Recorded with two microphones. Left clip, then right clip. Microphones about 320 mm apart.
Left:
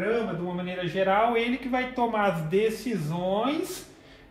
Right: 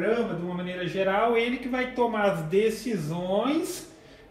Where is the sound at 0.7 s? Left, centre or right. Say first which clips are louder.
Left 2 dB; centre.